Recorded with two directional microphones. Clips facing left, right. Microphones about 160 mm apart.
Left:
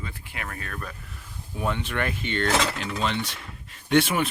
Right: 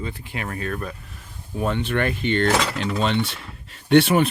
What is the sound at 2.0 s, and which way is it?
Speech, 55° right (ahead or behind).